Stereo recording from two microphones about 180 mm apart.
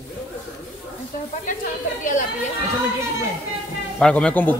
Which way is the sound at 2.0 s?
45° left (ahead or behind).